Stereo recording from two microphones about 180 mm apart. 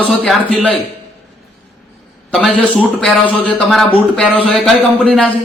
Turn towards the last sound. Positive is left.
turn(degrees=0)  # may be behind; listen again after turning